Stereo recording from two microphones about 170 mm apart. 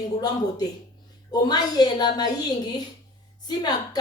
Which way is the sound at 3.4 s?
25° left (ahead or behind).